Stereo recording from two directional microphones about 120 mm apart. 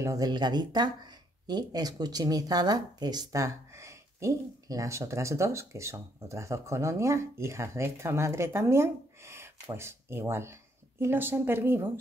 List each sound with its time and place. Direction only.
0.0 s speech: 30° right (ahead or behind)